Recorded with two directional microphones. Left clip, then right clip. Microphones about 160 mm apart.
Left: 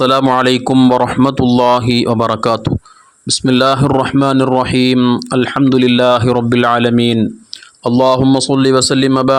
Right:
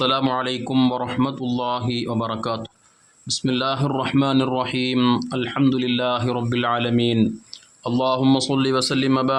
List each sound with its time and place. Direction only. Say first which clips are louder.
0.0 s speech: left 10 dB; 50° left (ahead or behind)
0.7 s a man's voice: left 8 dB; 35° left (ahead or behind)
1.2 s speech: left 13 dB; 60° left (ahead or behind)
4.9 s a man's voice: left 6 dB; 30° left (ahead or behind)
5.3 s speech: left 9 dB; 50° left (ahead or behind)